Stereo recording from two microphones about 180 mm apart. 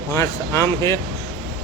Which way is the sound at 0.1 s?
15° left (ahead or behind).